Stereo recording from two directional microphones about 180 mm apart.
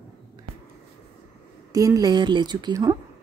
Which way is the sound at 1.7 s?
20° right (ahead or behind).